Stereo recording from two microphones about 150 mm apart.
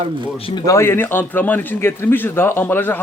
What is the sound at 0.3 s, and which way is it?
Speech, 40° left (ahead or behind).